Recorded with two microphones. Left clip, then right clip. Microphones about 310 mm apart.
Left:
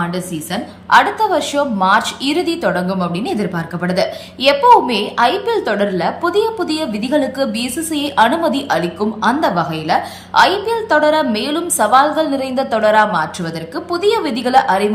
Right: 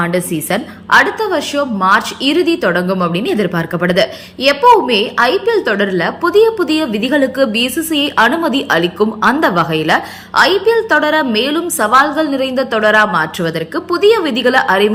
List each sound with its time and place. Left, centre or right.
0.0 s a woman's voice: centre